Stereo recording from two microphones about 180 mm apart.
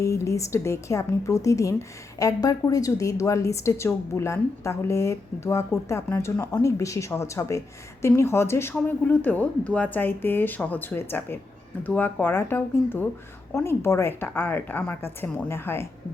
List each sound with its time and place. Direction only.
0.0 s a woman's voice: 15° left (ahead or behind)